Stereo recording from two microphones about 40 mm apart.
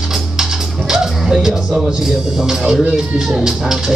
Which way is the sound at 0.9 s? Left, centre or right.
Centre.